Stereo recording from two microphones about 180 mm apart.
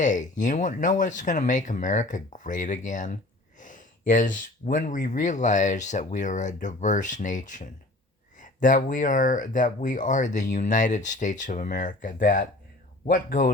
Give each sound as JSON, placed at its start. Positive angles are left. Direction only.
{"t": 0.0, "sound": "speech", "side_deg": 45}